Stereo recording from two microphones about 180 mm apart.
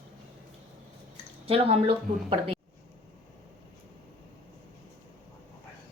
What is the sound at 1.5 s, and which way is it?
Speech, 30° right (ahead or behind).